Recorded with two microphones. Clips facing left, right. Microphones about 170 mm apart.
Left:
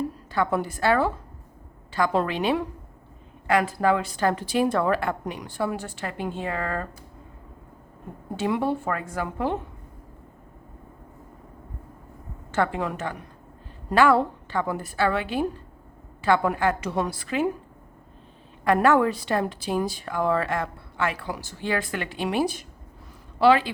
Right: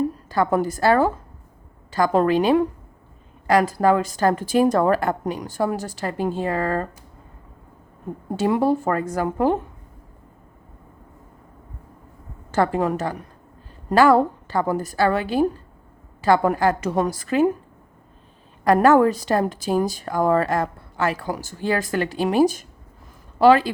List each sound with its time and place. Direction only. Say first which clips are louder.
0.3 s a woman's voice: right 3 dB; 40° right (ahead or behind)
8.4 s a woman's voice: right 5 dB; 40° right (ahead or behind)
12.5 s a woman's voice: right 5 dB; 40° right (ahead or behind)
18.6 s a woman's voice: right 5 dB; 40° right (ahead or behind)